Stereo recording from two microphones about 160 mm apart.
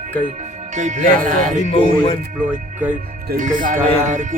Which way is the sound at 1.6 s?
45° left (ahead or behind).